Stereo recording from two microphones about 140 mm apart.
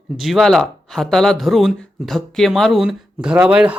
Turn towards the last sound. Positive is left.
turn(degrees=-5)  # may be behind; listen again after turning